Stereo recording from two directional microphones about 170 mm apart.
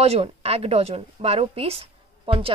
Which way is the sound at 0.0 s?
35° right (ahead or behind).